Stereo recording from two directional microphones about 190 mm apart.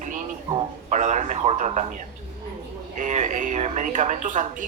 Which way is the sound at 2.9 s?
40° right (ahead or behind).